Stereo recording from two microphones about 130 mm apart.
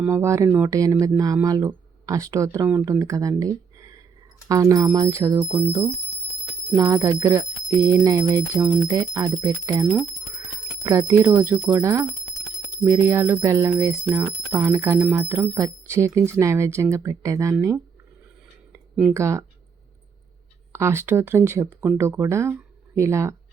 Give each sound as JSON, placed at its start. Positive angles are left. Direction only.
{"t": 0.0, "sound": "speech", "side_deg": -20}
{"t": 6.7, "sound": "speech", "side_deg": -25}
{"t": 9.8, "sound": "speech", "side_deg": -10}
{"t": 10.8, "sound": "speech", "side_deg": -25}
{"t": 19.1, "sound": "speech", "side_deg": -20}
{"t": 20.7, "sound": "speech", "side_deg": -20}